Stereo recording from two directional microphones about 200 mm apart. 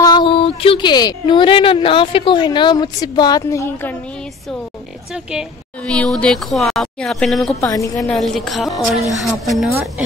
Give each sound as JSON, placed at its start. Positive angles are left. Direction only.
{"t": 0.0, "sound": "speech", "side_deg": 20}
{"t": 5.1, "sound": "speech", "side_deg": -5}
{"t": 7.6, "sound": "a woman's voice", "side_deg": 15}
{"t": 8.1, "sound": "speech", "side_deg": 0}